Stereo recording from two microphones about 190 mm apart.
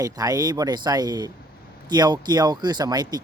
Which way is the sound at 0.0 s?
20° right (ahead or behind).